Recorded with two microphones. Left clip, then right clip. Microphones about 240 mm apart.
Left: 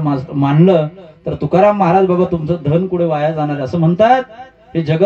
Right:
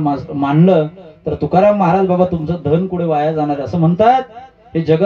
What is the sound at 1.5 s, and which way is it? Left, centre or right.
Speech, centre.